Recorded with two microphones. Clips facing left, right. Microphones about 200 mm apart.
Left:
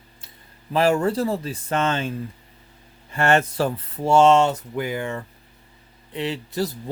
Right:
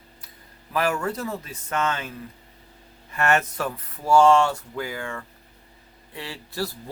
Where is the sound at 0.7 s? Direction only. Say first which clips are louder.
Left 6 dB; 30° left (ahead or behind).